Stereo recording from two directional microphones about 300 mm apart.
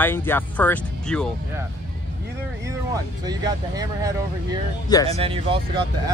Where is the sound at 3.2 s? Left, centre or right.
Centre.